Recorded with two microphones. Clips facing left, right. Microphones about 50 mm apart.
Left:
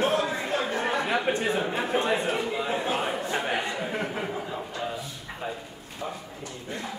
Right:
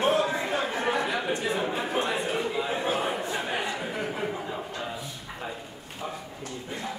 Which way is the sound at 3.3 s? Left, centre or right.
Left.